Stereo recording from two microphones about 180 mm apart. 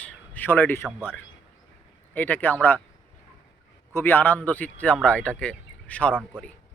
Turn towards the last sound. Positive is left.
turn(degrees=5)  # may be behind; listen again after turning